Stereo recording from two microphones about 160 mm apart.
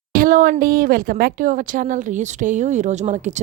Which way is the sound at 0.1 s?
60° right (ahead or behind).